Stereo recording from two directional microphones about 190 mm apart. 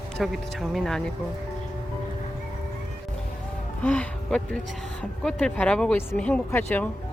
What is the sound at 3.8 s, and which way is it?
Speech, 5° left (ahead or behind).